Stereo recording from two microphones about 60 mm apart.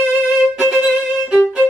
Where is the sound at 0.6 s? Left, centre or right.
Centre.